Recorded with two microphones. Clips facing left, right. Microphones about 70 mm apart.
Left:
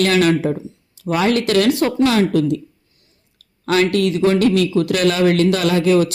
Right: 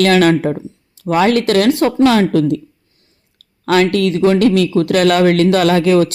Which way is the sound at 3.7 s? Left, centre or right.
Right.